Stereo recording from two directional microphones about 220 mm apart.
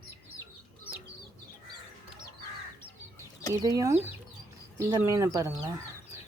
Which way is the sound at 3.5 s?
15° right (ahead or behind).